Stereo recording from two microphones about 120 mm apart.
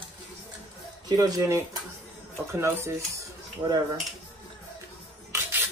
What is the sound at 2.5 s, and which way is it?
Speech, 25° right (ahead or behind).